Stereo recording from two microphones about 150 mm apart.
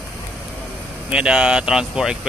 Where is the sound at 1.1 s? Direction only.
5° right (ahead or behind).